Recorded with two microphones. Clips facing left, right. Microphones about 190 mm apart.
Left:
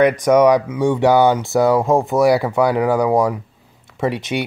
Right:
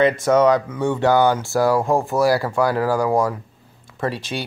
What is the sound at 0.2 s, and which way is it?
Speech, 15° left (ahead or behind).